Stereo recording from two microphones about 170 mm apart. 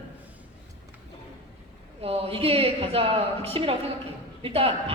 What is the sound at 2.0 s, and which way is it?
A man's voice, 35° right (ahead or behind).